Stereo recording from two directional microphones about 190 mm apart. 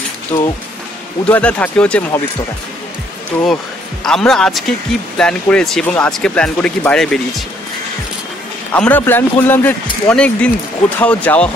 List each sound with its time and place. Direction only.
0.3 s speech: 15° left (ahead or behind)
4.0 s speech: 5° left (ahead or behind)
8.7 s speech: 10° left (ahead or behind)